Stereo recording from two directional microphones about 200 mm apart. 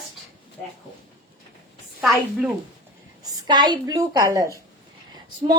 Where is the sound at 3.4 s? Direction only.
20° right (ahead or behind).